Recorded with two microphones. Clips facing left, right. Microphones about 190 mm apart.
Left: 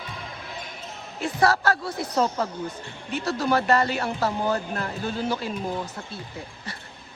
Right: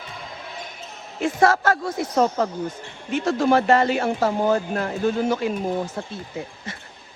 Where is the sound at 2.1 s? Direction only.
45° right (ahead or behind).